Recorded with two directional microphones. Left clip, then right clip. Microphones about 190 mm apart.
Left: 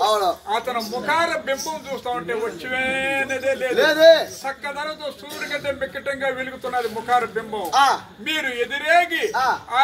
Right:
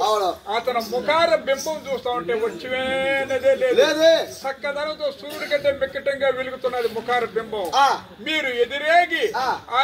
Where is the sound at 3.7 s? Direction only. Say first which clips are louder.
Left 6 dB; 5° right (ahead or behind).